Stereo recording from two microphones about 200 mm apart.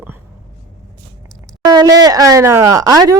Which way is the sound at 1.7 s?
20° right (ahead or behind).